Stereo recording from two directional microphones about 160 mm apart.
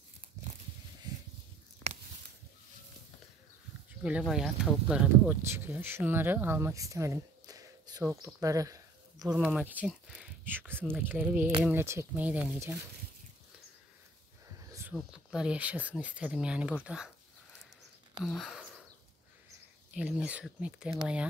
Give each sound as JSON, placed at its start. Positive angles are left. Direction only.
{"t": 4.2, "sound": "speech", "side_deg": 0}
{"t": 9.4, "sound": "speech", "side_deg": -5}
{"t": 14.7, "sound": "a sound", "side_deg": -15}
{"t": 15.0, "sound": "speech", "side_deg": -5}
{"t": 18.2, "sound": "speech", "side_deg": 0}
{"t": 19.9, "sound": "speech", "side_deg": -10}